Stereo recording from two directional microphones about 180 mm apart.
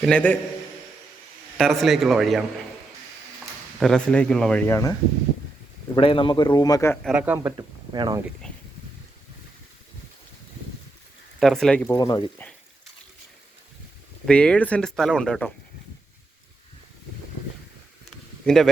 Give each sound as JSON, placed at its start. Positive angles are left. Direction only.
{"t": 0.0, "sound": "a man's voice", "side_deg": 5}
{"t": 1.5, "sound": "speech", "side_deg": 0}
{"t": 3.8, "sound": "speech", "side_deg": 5}
{"t": 6.0, "sound": "a man's voice", "side_deg": 30}
{"t": 7.0, "sound": "speech", "side_deg": -5}
{"t": 7.9, "sound": "speech", "side_deg": -25}
{"t": 11.3, "sound": "speech", "side_deg": 0}
{"t": 11.9, "sound": "a man's voice", "side_deg": 25}
{"t": 14.3, "sound": "speech", "side_deg": 5}
{"t": 18.4, "sound": "speech", "side_deg": 0}